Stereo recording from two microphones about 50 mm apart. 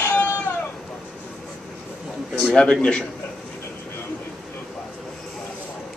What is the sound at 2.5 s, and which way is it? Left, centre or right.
Speech, centre.